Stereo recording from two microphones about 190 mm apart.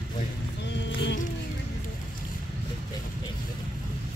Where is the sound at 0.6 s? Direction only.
70° left (ahead or behind).